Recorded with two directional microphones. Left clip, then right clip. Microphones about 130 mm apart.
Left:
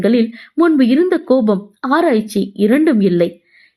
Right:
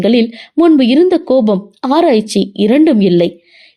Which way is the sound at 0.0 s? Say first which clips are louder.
Right 3 dB; 40° right (ahead or behind).